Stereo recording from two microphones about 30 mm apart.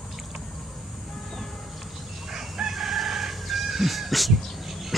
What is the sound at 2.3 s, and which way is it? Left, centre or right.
Chicken, centre.